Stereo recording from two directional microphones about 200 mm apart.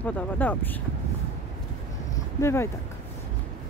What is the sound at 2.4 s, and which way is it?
Speech, 15° left (ahead or behind).